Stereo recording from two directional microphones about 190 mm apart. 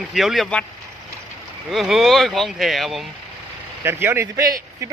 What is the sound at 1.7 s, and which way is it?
Speech, centre (ahead or behind).